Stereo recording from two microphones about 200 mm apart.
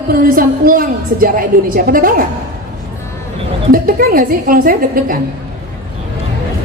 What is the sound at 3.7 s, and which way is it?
A woman's voice, 45° right (ahead or behind).